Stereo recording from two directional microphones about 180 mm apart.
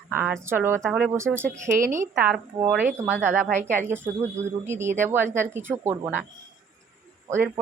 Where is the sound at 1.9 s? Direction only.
10° right (ahead or behind).